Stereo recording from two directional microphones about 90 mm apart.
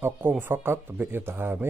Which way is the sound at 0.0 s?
25° right (ahead or behind).